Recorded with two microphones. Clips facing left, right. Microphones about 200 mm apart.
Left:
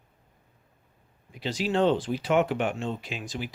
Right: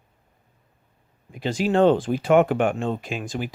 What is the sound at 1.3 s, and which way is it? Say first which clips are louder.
Speech: right 6 dB; 50° right (ahead or behind).